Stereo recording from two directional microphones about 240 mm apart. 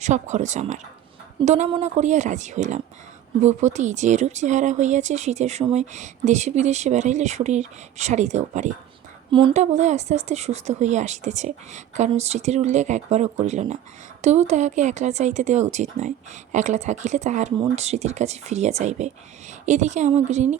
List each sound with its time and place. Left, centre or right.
0.0 s speech: right